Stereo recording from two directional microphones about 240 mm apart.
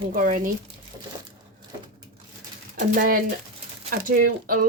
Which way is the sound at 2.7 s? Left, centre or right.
Right.